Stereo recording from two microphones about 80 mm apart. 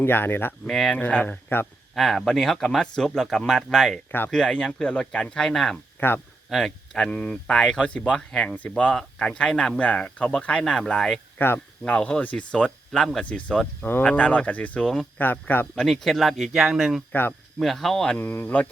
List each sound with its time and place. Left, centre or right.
0.0 s speech: left
0.7 s speech: centre
1.0 s speech: left
2.0 s speech: centre
6.0 s speech: left
6.5 s speech: centre
6.9 s speech: centre
11.3 s speech: left
11.8 s speech: centre
13.2 s speech: centre
15.7 s speech: centre
17.1 s speech: left
17.6 s speech: centre
18.2 s speech: left